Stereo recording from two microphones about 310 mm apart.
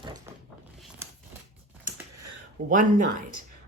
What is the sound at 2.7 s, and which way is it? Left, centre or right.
Speech, right.